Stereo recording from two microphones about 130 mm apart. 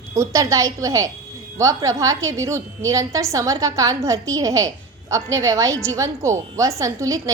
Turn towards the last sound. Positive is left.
turn(degrees=-25)  # may be behind; listen again after turning